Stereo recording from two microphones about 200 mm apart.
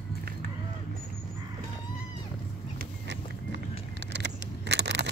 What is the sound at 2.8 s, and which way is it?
Horse, 60° right (ahead or behind).